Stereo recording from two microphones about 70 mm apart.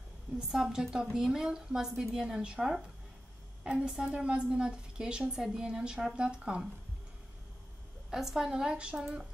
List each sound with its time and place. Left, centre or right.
0.5 s a woman's voice: centre
8.1 s a woman's voice: centre